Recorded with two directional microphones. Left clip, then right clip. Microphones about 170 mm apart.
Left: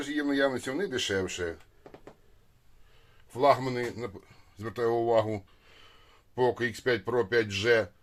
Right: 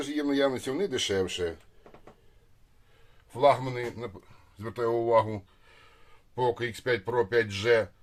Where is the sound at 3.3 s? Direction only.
10° left (ahead or behind).